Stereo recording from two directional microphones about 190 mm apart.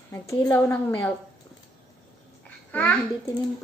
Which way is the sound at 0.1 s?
15° left (ahead or behind).